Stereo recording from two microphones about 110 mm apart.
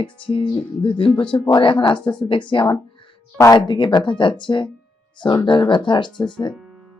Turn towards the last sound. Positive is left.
turn(degrees=45)  # may be behind; listen again after turning